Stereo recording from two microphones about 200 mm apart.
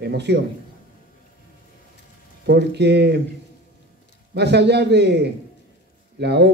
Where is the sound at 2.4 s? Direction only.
60° right (ahead or behind).